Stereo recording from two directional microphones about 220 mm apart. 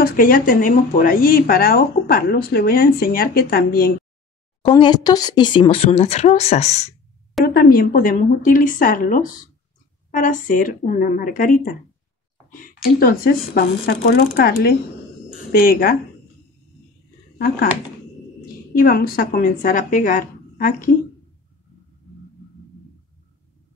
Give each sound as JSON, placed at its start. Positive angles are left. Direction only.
{"t": 0.0, "sound": "speech", "side_deg": 40}
{"t": 4.6, "sound": "speech", "side_deg": 20}
{"t": 7.4, "sound": "speech", "side_deg": 40}
{"t": 18.7, "sound": "speech", "side_deg": 40}